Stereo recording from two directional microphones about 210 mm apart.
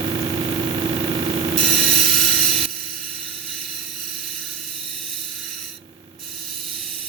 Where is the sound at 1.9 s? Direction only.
Centre (ahead or behind).